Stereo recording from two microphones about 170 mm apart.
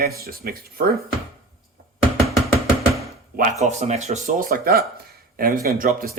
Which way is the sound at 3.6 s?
40° right (ahead or behind).